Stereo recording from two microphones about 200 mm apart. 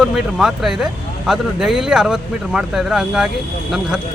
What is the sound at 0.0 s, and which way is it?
Speech, centre (ahead or behind).